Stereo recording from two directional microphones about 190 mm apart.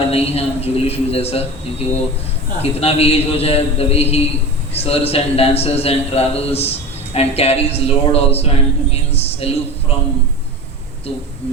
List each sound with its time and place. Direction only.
0.1 s a man's voice: 30° left (ahead or behind)